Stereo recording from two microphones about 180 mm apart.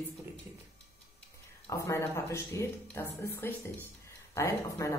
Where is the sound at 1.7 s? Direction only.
15° left (ahead or behind).